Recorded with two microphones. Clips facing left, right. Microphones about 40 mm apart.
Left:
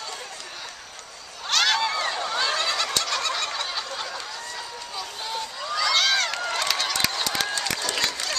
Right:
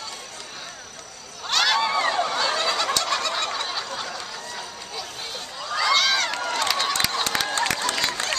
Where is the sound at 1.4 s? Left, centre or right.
Centre.